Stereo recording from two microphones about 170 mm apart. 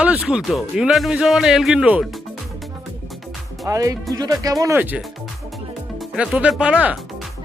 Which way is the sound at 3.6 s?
20° right (ahead or behind).